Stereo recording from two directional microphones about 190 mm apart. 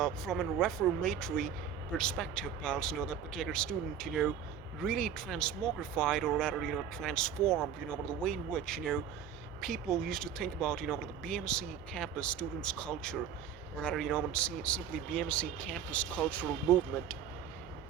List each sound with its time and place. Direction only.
0.0 s speech: centre (ahead or behind)